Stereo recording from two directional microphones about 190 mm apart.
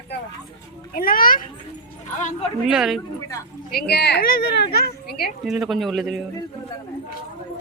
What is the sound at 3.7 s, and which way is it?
A woman's voice, 55° left (ahead or behind).